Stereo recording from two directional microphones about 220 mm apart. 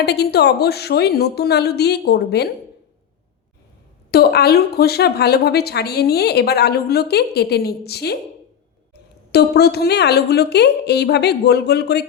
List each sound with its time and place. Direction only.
0.0 s a woman's voice: 45° left (ahead or behind)
4.1 s a woman's voice: 45° left (ahead or behind)
9.3 s a woman's voice: 45° left (ahead or behind)